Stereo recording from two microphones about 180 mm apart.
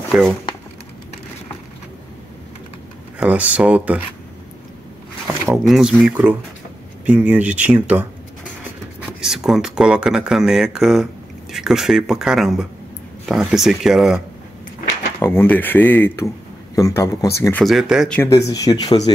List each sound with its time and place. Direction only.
0.1 s speech: 5° right (ahead or behind)
3.2 s speech: 5° right (ahead or behind)
5.6 s speech: centre (ahead or behind)
9.2 s speech: 5° right (ahead or behind)
15.1 s speech: 10° left (ahead or behind)
17.6 s speech: centre (ahead or behind)
18.1 s speech: 15° left (ahead or behind)